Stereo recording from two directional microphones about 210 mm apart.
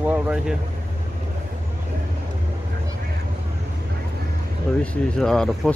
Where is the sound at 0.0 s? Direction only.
5° right (ahead or behind).